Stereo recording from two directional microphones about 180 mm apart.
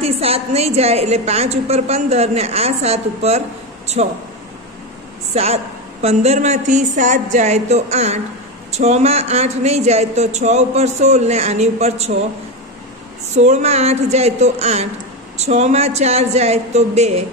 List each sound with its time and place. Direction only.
0.0 s a woman's voice: 35° right (ahead or behind)
5.3 s a woman's voice: 35° right (ahead or behind)
13.3 s a woman's voice: 40° right (ahead or behind)